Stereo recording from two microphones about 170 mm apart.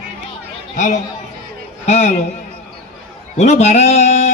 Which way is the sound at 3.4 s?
40° left (ahead or behind).